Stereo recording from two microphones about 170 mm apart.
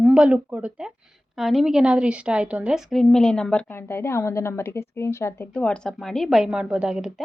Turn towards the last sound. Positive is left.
turn(degrees=-5)  # may be behind; listen again after turning